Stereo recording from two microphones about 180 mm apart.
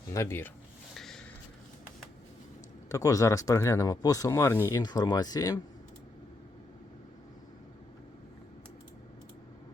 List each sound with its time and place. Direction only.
0.1 s speech: 15° left (ahead or behind)
0.9 s snort: centre (ahead or behind)
2.9 s speech: 20° left (ahead or behind)